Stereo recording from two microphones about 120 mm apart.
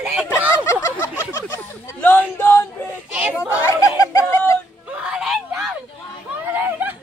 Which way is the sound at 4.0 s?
25° left (ahead or behind).